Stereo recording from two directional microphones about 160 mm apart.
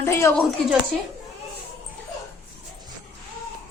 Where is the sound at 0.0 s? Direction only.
15° left (ahead or behind).